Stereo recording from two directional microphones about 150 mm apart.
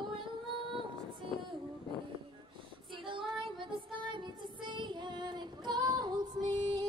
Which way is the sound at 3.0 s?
35° right (ahead or behind).